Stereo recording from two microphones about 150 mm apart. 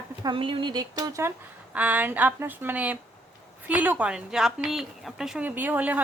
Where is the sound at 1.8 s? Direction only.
10° right (ahead or behind).